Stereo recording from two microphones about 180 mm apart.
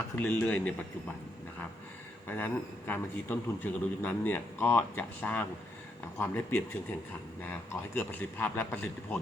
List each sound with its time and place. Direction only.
0.2 s a man's voice: 10° left (ahead or behind)
2.3 s a man's voice: 10° left (ahead or behind)